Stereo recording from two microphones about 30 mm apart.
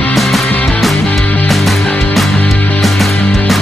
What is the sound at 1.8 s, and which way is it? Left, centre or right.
Music, centre.